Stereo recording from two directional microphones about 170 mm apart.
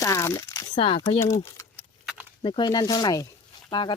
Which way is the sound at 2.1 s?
10° right (ahead or behind).